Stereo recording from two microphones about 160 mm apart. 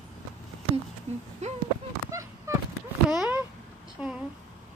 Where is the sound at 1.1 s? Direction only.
45° right (ahead or behind).